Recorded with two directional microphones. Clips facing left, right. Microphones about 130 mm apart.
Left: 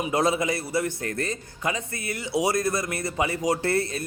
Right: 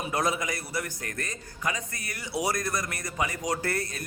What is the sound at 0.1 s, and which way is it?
A man's voice, 25° left (ahead or behind).